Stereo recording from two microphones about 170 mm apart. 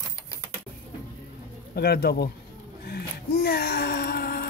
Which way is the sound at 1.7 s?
70° left (ahead or behind).